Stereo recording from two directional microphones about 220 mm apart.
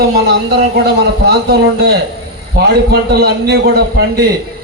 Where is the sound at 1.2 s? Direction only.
45° right (ahead or behind).